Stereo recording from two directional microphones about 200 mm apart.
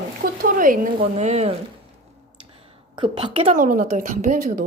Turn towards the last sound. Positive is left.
turn(degrees=-40)  # may be behind; listen again after turning